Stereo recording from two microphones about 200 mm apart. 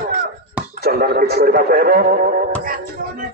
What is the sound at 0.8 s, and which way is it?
Speech, 50° right (ahead or behind).